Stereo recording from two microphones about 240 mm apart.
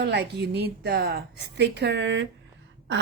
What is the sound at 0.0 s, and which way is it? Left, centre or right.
A woman's voice, right.